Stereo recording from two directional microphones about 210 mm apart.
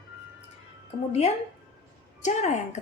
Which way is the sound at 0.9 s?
30° left (ahead or behind).